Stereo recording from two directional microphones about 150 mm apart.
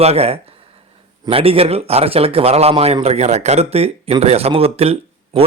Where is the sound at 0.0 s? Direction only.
45° right (ahead or behind).